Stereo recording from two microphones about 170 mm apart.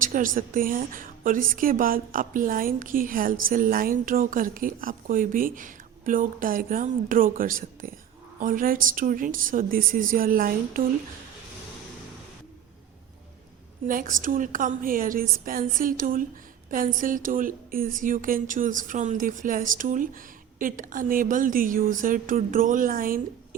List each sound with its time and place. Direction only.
0.0 s a woman's voice: 50° right (ahead or behind)
13.8 s a woman's voice: 55° right (ahead or behind)